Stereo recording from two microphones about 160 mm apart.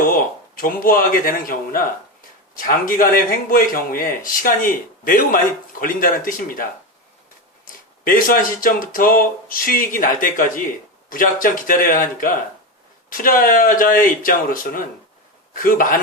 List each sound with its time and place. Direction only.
0.0 s speech: 65° left (ahead or behind)